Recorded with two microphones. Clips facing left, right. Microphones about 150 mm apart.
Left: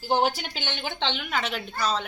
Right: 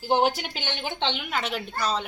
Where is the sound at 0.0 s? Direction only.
15° right (ahead or behind).